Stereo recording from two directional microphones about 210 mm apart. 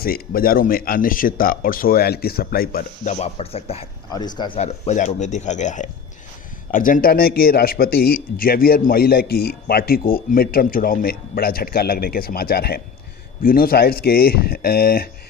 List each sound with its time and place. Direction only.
0.0 s a man's voice: 45° left (ahead or behind)